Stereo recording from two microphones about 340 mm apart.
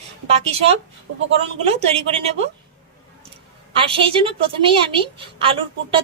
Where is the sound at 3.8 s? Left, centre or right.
Centre.